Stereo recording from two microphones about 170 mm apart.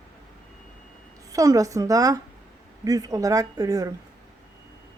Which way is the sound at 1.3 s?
20° right (ahead or behind).